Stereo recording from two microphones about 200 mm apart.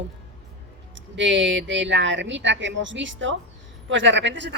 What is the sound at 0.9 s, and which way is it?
Speech, 65° right (ahead or behind).